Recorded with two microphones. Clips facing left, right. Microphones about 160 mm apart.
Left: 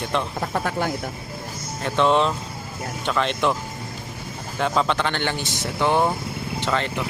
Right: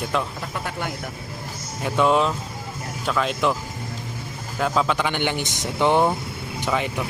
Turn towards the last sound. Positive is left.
turn(degrees=-10)  # may be behind; listen again after turning